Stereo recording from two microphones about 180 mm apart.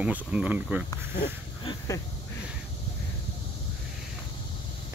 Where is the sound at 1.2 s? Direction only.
25° left (ahead or behind).